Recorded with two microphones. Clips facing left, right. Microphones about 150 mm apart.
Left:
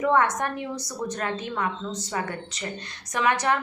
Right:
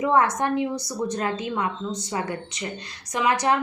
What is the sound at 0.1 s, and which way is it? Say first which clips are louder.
A woman's voice: right 4 dB; 30° right (ahead or behind).